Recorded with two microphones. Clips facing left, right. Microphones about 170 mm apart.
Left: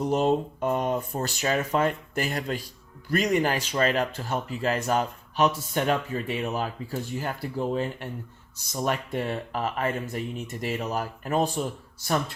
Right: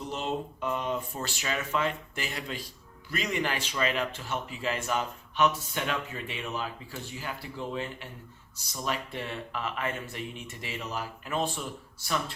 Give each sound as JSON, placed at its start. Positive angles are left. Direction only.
{"t": 0.0, "sound": "speech", "side_deg": 45}